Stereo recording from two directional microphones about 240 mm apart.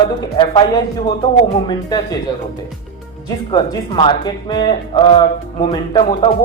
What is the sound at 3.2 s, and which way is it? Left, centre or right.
Speech, centre.